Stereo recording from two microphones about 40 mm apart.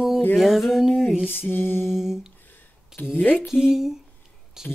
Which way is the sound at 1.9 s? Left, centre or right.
Centre.